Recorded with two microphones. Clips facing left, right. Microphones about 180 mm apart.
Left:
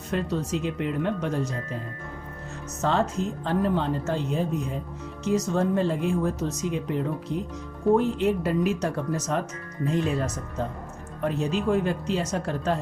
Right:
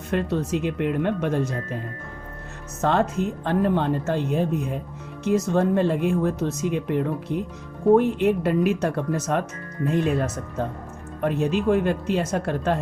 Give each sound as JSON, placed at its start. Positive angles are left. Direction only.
{"t": 0.1, "sound": "speech", "side_deg": -60}
{"t": 2.8, "sound": "speech", "side_deg": -60}
{"t": 11.2, "sound": "speech", "side_deg": -60}